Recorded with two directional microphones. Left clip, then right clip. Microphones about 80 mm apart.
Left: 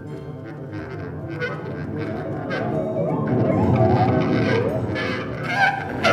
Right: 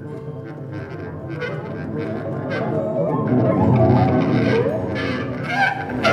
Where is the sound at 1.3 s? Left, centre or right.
Left.